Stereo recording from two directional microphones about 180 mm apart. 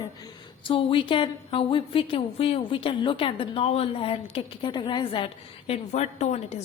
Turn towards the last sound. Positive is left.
turn(degrees=40)  # may be behind; listen again after turning